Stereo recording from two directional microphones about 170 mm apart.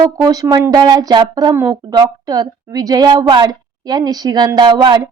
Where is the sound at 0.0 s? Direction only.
20° right (ahead or behind).